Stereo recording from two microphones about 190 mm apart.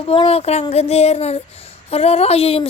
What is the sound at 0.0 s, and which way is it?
Speech, 30° left (ahead or behind).